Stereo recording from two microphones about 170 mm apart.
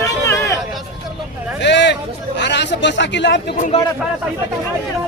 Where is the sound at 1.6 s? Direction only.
90° left.